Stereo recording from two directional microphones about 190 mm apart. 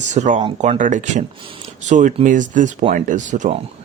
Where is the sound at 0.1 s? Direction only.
40° right (ahead or behind).